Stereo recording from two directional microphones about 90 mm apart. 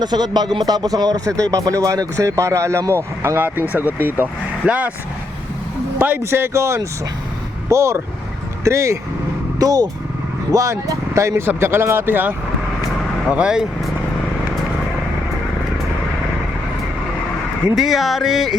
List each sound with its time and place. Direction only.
0.0 s speech: 50° right (ahead or behind); by 2.9 s 35° right (ahead or behind)
3.2 s speech: 20° right (ahead or behind)
6.0 s speech: 20° right (ahead or behind)
13.3 s speech: 10° right (ahead or behind)
17.7 s a sound: centre (ahead or behind)